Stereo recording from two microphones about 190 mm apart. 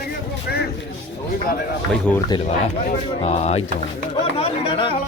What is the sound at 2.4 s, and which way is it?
Speech, 35° left (ahead or behind).